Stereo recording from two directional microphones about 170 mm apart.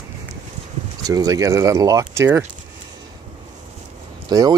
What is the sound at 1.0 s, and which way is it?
Speech, 20° right (ahead or behind).